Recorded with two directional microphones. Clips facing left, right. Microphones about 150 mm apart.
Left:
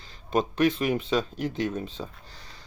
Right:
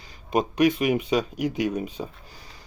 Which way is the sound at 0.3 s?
10° right (ahead or behind).